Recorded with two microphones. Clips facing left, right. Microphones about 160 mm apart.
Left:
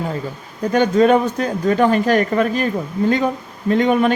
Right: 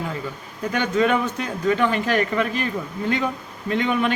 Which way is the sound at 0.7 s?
40° left (ahead or behind).